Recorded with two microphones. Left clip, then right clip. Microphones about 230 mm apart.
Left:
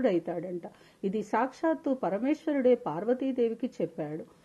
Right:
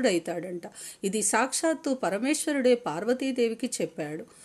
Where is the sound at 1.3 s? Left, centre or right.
Right.